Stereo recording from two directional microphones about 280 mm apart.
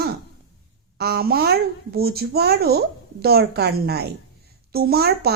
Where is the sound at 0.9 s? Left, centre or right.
Right.